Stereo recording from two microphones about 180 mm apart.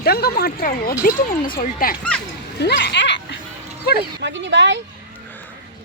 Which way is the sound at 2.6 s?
70° left (ahead or behind).